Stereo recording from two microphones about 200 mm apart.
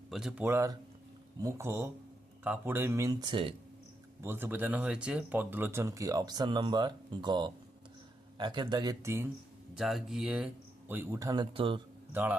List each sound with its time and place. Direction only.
0.1 s speech: 5° right (ahead or behind); by 3.5 s 25° right (ahead or behind)
4.2 s speech: 10° right (ahead or behind)
9.7 s speech: centre (ahead or behind); by 11.8 s 25° right (ahead or behind)
12.1 s speech: 10° right (ahead or behind)